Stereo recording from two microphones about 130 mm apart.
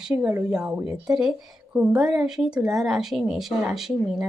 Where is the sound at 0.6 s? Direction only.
5° right (ahead or behind).